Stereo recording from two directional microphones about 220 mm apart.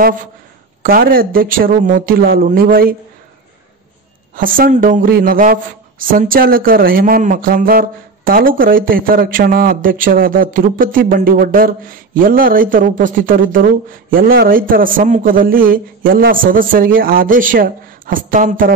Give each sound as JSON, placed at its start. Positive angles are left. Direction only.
{"t": 0.8, "sound": "speech", "side_deg": -40}
{"t": 4.4, "sound": "speech", "side_deg": -40}